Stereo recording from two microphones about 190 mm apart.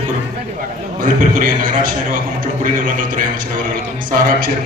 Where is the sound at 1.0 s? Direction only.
45° right (ahead or behind).